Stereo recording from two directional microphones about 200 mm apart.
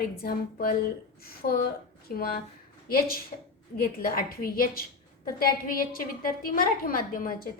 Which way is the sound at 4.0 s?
45° left (ahead or behind).